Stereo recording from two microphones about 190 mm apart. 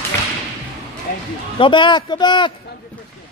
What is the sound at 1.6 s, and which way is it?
Speech, 25° left (ahead or behind).